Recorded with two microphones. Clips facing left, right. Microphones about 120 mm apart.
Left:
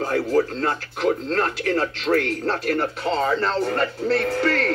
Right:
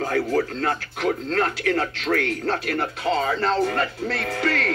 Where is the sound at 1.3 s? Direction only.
35° left (ahead or behind).